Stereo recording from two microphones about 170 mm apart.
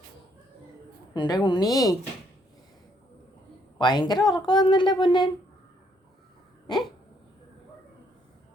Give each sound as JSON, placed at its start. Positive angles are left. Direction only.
{"t": 1.1, "sound": "a woman's voice", "side_deg": 25}
{"t": 3.8, "sound": "a woman's voice", "side_deg": 25}